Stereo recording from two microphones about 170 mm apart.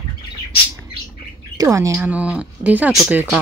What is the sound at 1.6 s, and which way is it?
Speech, 20° right (ahead or behind).